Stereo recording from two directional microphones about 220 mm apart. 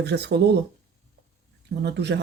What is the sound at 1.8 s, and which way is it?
Speech, 50° right (ahead or behind).